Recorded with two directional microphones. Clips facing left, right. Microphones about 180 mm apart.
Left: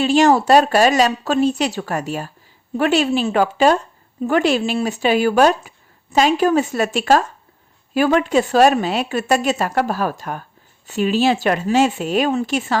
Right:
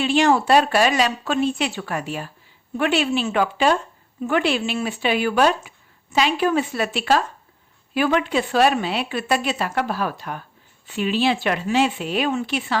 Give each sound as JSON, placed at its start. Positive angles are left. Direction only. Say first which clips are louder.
{"t": 0.0, "sound": "a woman's voice", "louder": "left 4 dB", "side_deg": 40}